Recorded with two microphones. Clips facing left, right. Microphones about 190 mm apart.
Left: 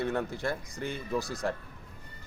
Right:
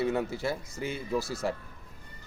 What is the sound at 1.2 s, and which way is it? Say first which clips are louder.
Speech: right 1 dB; 15° left (ahead or behind).